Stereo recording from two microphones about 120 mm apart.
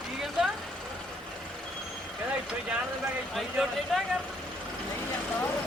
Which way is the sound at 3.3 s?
Centre (ahead or behind).